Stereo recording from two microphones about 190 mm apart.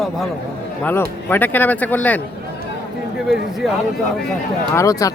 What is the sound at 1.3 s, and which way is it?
Speech, 10° left (ahead or behind).